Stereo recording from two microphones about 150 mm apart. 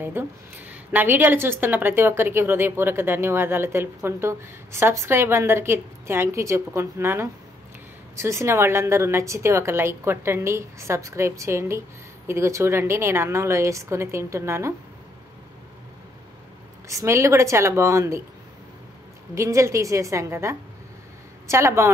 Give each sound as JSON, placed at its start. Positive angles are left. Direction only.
{"t": 0.0, "sound": "a woman's voice", "side_deg": -10}
{"t": 16.8, "sound": "speech", "side_deg": -20}
{"t": 19.3, "sound": "speech", "side_deg": -20}